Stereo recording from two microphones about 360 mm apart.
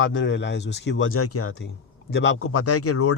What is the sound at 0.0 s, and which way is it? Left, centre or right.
Speech, left.